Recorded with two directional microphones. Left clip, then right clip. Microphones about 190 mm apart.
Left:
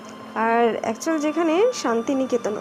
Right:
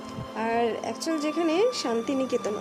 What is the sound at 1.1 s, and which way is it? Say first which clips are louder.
Speech: left 5 dB; centre (ahead or behind).